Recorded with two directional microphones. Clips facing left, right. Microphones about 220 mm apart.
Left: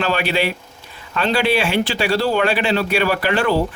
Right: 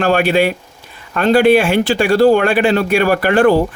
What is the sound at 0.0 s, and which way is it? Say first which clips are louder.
Speech: right 7 dB; 50° right (ahead or behind).